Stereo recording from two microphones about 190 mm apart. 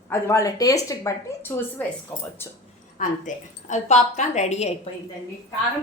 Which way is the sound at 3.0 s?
40° left (ahead or behind).